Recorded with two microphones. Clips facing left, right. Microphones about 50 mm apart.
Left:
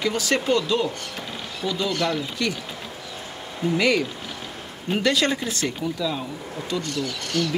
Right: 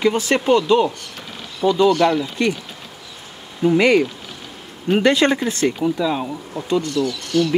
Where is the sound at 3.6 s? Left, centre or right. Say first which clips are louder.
Right 7 dB; right.